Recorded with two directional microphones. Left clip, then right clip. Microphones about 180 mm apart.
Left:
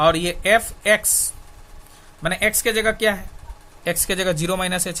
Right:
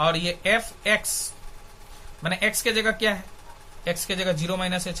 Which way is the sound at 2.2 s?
50° left (ahead or behind).